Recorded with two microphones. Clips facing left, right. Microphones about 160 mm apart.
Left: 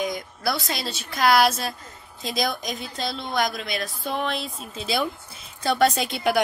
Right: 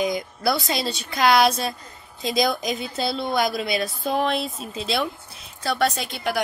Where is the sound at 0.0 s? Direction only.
Centre (ahead or behind).